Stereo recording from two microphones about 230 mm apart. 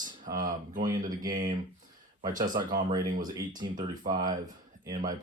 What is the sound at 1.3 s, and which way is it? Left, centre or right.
Speech, right.